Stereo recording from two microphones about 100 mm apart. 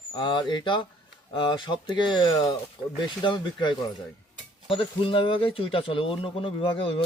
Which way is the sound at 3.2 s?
55° left (ahead or behind).